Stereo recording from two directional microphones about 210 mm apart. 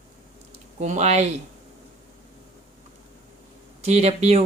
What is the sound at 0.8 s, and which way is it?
Speech, 35° right (ahead or behind).